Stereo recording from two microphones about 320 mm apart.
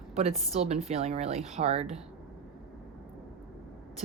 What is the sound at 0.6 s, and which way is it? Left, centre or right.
Speech, centre.